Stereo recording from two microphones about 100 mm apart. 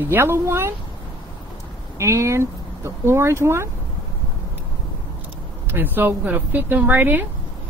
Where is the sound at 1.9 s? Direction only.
30° right (ahead or behind).